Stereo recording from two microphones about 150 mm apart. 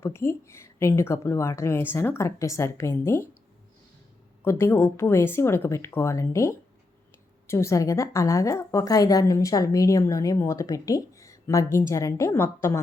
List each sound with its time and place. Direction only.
0.0 s a woman's voice: 15° left (ahead or behind)
4.4 s a woman's voice: 15° left (ahead or behind)